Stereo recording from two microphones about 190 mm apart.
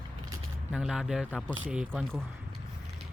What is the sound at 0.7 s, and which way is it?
Speech, 5° right (ahead or behind).